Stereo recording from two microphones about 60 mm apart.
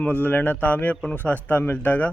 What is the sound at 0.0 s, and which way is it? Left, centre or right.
A man's voice, left.